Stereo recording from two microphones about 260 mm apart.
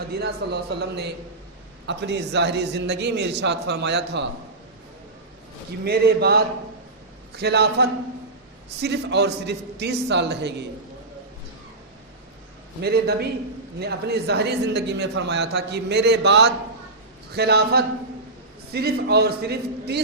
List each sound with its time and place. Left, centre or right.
0.2 s speech: right
5.8 s speech: right
12.8 s speech: right